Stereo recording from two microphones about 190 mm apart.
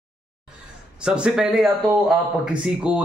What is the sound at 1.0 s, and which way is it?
A man's voice, 5° right (ahead or behind).